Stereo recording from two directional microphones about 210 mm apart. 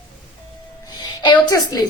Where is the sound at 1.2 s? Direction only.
20° left (ahead or behind).